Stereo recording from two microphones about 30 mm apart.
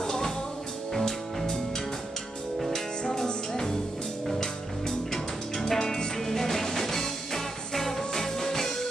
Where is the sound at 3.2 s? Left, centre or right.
Left.